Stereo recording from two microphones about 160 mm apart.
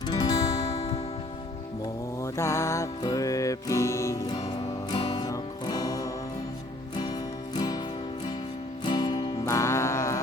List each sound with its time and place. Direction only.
0.1 s music: 25° left (ahead or behind)
0.7 s music: 40° left (ahead or behind)
2.2 s music: 15° left (ahead or behind)
7.5 s music: 25° left (ahead or behind)
8.8 s music: 25° left (ahead or behind)